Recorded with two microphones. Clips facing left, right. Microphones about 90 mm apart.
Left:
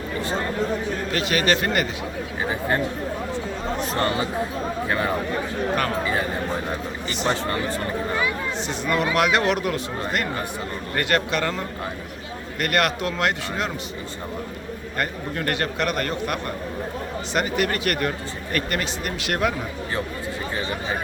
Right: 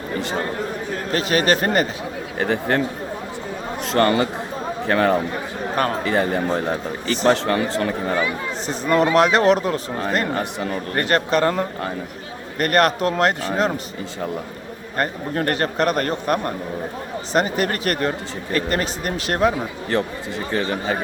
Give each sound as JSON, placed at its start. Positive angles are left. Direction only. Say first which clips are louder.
{"t": 1.1, "sound": "speech", "louder": "right 4 dB", "side_deg": -40}
{"t": 2.4, "sound": "speech", "louder": "right 4 dB", "side_deg": -70}
{"t": 3.9, "sound": "speech", "louder": "right 8 dB", "side_deg": -65}
{"t": 5.7, "sound": "speech", "louder": "right 5 dB", "side_deg": -35}
{"t": 7.4, "sound": "speech", "louder": "right 5 dB", "side_deg": -85}
{"t": 8.6, "sound": "speech", "louder": "right 6 dB", "side_deg": -35}
{"t": 14.9, "sound": "speech", "louder": "right 5 dB", "side_deg": -35}